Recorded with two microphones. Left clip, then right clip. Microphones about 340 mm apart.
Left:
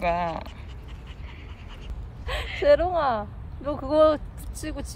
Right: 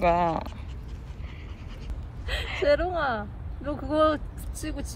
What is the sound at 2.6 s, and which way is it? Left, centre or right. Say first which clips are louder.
Speech: left 4 dB; left.